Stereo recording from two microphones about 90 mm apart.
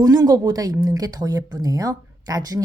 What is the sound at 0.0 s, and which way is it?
Speech, 45° right (ahead or behind).